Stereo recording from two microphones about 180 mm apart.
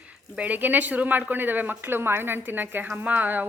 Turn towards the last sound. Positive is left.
turn(degrees=-10)  # may be behind; listen again after turning